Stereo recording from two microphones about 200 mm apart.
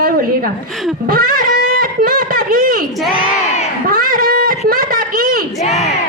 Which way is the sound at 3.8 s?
45° right (ahead or behind).